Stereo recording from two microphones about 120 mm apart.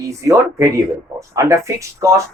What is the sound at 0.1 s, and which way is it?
A man's voice, 25° right (ahead or behind).